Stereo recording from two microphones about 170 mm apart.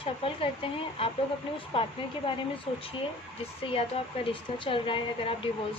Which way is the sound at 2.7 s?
30° left (ahead or behind).